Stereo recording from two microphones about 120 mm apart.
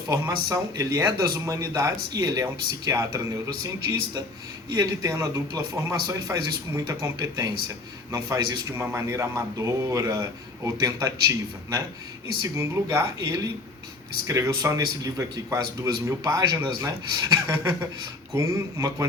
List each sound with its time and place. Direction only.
0.1 s a man's voice: 25° right (ahead or behind)
14.3 s a man's voice: 25° right (ahead or behind)
17.4 s a man's voice: 20° right (ahead or behind)